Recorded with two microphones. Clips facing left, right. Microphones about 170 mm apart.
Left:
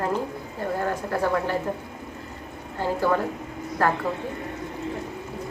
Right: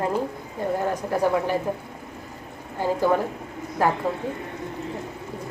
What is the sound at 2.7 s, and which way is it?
A woman's voice, 15° right (ahead or behind).